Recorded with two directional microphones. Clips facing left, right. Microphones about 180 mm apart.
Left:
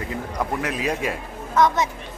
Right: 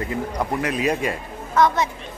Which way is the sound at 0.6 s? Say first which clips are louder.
Right 3 dB; centre (ahead or behind).